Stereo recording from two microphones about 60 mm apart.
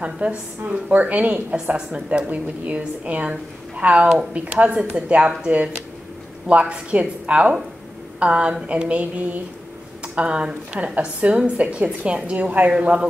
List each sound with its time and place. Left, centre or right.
0.0 s a woman's voice: right